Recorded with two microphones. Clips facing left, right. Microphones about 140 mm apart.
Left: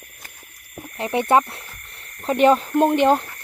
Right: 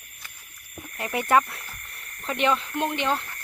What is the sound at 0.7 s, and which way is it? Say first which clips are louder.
Speech: left 6 dB; 30° left (ahead or behind).